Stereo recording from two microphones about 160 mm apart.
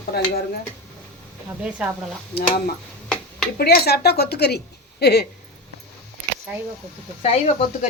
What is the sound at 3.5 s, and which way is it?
Speech, 80° left.